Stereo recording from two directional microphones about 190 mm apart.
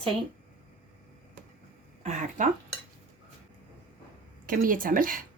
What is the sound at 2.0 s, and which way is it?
Speech, 40° right (ahead or behind).